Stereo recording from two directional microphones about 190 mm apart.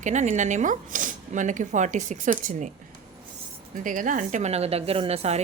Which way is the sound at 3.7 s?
45° right (ahead or behind).